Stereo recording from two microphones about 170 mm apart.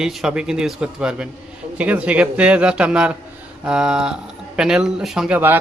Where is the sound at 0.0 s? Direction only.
5° right (ahead or behind).